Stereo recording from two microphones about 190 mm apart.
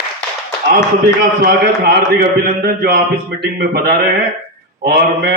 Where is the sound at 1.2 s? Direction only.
55° right (ahead or behind).